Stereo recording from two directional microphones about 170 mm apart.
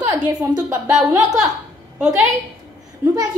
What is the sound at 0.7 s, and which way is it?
Speech, 20° right (ahead or behind).